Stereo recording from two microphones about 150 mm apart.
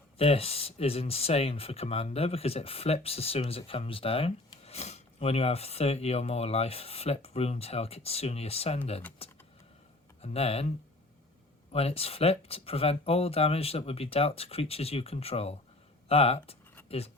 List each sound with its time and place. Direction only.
0.2 s speech: 40° left (ahead or behind)
11.7 s speech: 40° left (ahead or behind)